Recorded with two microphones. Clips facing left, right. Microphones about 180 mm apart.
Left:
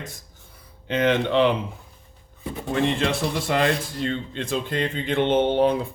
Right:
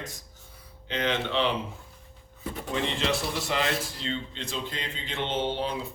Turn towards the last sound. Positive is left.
turn(degrees=55)  # may be behind; listen again after turning